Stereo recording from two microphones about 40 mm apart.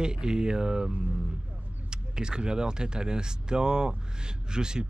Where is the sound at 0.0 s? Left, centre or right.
Right.